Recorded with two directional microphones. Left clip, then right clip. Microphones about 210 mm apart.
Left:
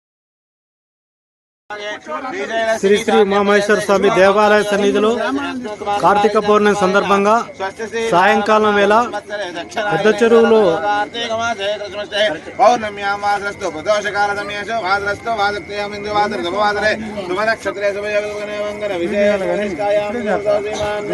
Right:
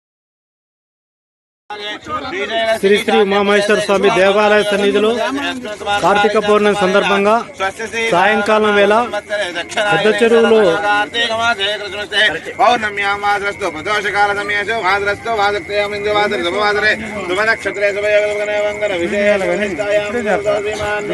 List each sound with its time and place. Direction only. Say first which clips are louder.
2.3 s a man's voice: right 2 dB; 5° left (ahead or behind)
5.4 s speech: right 2 dB; 25° right (ahead or behind)
6.5 s a man's voice: right 1 dB; centre (ahead or behind)
7.6 s speech: right 3 dB; 25° right (ahead or behind)
8.1 s a man's voice: even; centre (ahead or behind)
9.1 s a man's voice: right 4 dB; 15° right (ahead or behind); by 20.1 s 35° left (ahead or behind)
20.1 s speech: right 3 dB; 20° right (ahead or behind)
20.7 s a man's voice: right 2 dB; 40° left (ahead or behind)